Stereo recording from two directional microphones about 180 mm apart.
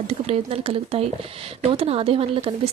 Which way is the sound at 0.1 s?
35° right (ahead or behind).